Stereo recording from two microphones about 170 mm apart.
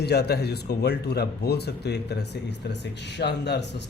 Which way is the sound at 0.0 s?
75° left (ahead or behind).